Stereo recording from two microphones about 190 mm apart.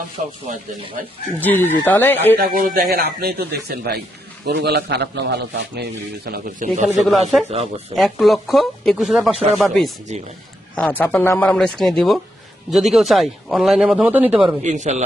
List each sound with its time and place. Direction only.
1.4 s a man's voice: 10° left (ahead or behind)
2.4 s a man's voice: 50° right (ahead or behind)
6.9 s speech: centre (ahead or behind)
7.4 s speech: 35° right (ahead or behind)
7.9 s speech: centre (ahead or behind)
10.1 s speech: 35° right (ahead or behind)
10.8 s a man's voice: 10° left (ahead or behind); by 14.4 s 10° right (ahead or behind)
14.6 s speech: 40° right (ahead or behind)